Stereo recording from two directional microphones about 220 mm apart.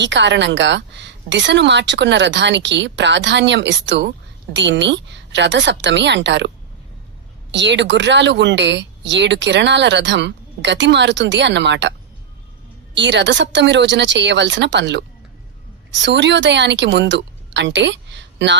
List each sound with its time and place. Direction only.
0.0 s speech: 55° right (ahead or behind)
7.5 s a woman's voice: 55° right (ahead or behind)